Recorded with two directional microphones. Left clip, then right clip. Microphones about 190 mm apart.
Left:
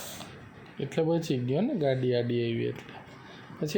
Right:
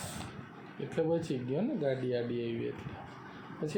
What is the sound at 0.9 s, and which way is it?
Speech, 55° left (ahead or behind).